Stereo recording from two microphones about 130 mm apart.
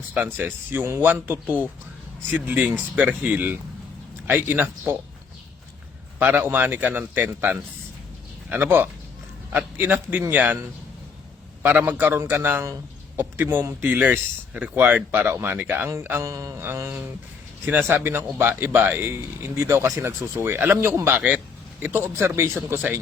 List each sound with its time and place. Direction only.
0.1 s speech: 15° right (ahead or behind)
6.1 s speech: 15° right (ahead or behind)
15.9 s mantra: 20° right (ahead or behind)
17.7 s speech: 15° right (ahead or behind)